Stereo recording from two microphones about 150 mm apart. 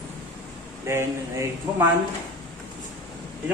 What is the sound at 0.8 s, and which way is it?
A man's voice, 20° right (ahead or behind).